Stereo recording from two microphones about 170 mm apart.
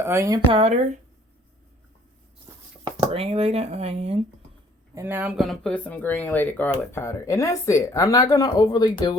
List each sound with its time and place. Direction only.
0.0 s speech: 15° right (ahead or behind)
0.5 s speech: 40° right (ahead or behind)
2.8 s speech: 35° right (ahead or behind)
4.9 s speech: 10° right (ahead or behind)
5.4 s speech: 5° left (ahead or behind); by 9.1 s 25° left (ahead or behind)